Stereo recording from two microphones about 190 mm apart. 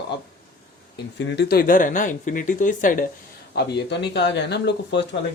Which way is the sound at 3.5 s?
65° left (ahead or behind).